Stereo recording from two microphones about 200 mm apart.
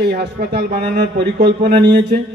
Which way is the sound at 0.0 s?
55° right (ahead or behind).